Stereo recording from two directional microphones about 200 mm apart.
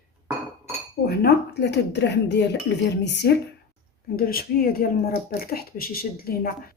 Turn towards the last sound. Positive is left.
turn(degrees=50)  # may be behind; listen again after turning